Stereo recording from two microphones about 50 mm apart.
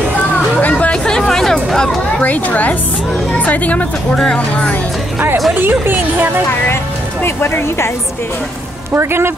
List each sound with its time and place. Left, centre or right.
0.6 s hubbub: left
0.9 s music: centre
2.2 s a woman's voice: left
4.1 s speech: centre
5.5 s speech: right
7.2 s speech: left
8.9 s speech: right